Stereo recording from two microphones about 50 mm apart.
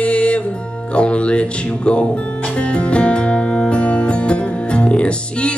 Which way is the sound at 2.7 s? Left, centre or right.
Left.